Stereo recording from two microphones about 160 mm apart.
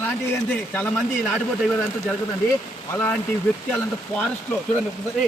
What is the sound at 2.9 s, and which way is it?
Speech, 15° left (ahead or behind).